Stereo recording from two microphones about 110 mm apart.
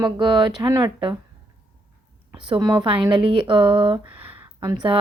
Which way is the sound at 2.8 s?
55° right (ahead or behind).